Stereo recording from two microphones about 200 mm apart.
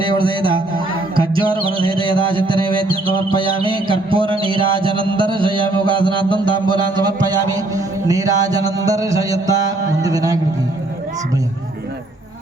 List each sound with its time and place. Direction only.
0.0 s a man's voice: 25° right (ahead or behind)
1.1 s music: 25° right (ahead or behind)
3.6 s a sound: 25° right (ahead or behind)
8.0 s mantra: 15° right (ahead or behind)